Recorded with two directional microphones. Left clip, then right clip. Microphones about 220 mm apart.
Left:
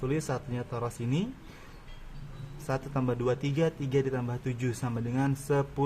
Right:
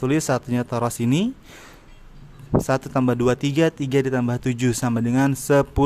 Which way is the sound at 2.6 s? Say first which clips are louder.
Right 7 dB; 35° right (ahead or behind).